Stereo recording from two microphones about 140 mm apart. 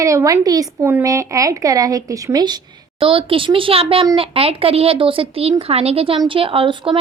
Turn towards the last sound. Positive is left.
turn(degrees=-35)  # may be behind; listen again after turning